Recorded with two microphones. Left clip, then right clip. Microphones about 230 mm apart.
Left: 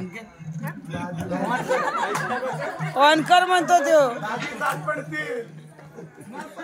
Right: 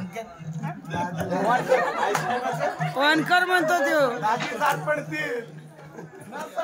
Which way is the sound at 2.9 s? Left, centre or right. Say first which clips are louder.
Left 5 dB; centre.